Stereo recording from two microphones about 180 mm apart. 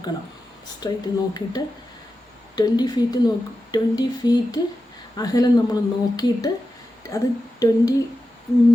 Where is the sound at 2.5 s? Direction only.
25° left (ahead or behind).